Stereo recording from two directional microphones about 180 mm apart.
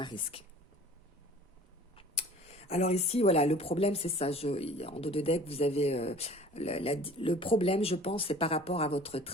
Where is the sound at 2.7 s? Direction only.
40° left (ahead or behind).